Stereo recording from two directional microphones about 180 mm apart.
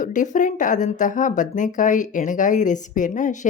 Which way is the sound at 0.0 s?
45° left (ahead or behind).